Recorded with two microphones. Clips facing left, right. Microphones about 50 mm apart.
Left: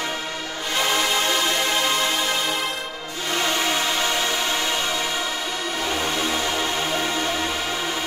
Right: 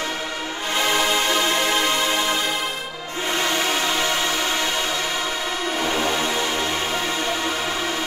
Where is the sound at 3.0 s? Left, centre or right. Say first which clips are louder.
Right 3 dB; right.